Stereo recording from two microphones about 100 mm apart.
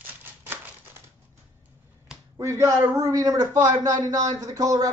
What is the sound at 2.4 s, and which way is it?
A man's voice, 30° right (ahead or behind).